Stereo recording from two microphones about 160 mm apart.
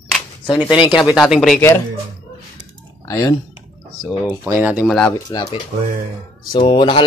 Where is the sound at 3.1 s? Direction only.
20° left (ahead or behind).